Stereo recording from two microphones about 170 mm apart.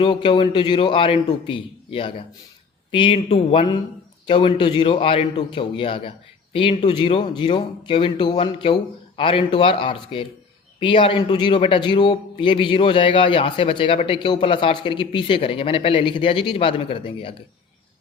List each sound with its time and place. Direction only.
0.0 s a man's voice: 30° left (ahead or behind)